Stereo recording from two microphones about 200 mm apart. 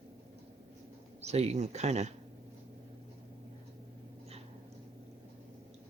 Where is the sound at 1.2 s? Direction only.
30° right (ahead or behind).